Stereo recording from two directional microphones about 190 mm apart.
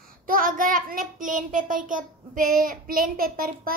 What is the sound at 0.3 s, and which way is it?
A child's voice, 45° right (ahead or behind).